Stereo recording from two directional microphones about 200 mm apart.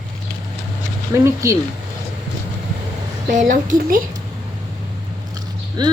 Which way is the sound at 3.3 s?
35° right (ahead or behind).